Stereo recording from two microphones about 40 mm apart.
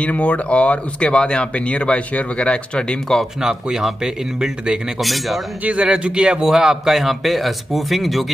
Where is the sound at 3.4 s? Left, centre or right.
Centre.